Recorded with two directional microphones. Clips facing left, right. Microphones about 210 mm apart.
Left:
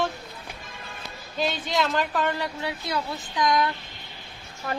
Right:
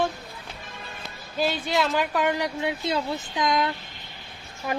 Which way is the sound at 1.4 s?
5° right (ahead or behind).